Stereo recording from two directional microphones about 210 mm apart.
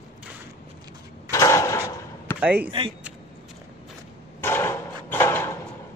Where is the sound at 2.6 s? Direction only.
25° right (ahead or behind).